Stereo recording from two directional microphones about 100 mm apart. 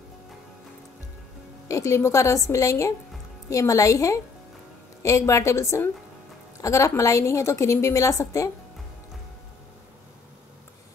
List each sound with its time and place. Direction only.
1.7 s a woman's voice: 30° left (ahead or behind)